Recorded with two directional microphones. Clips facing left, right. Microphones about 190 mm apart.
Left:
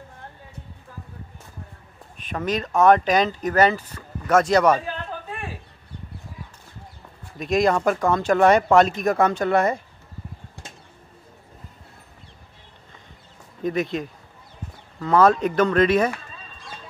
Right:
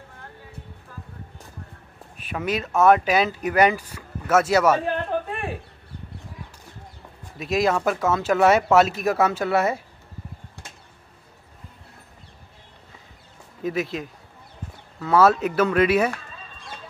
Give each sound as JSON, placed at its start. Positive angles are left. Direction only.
{"t": 2.1, "sound": "speech", "side_deg": -10}
{"t": 4.8, "sound": "a sound", "side_deg": -55}
{"t": 7.3, "sound": "speech", "side_deg": -5}
{"t": 13.6, "sound": "speech", "side_deg": -5}